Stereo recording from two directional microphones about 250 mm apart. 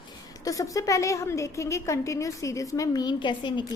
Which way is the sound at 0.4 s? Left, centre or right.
Centre.